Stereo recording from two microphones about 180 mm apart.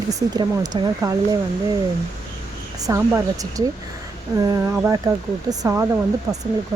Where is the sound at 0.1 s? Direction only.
20° right (ahead or behind).